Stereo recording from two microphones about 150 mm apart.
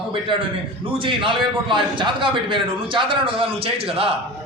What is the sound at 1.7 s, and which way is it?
A man's voice, 35° right (ahead or behind).